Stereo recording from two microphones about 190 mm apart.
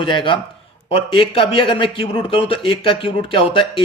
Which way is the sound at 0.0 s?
25° left (ahead or behind).